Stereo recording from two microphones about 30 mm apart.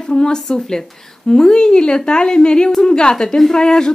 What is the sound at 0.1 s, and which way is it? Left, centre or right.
Speech, left.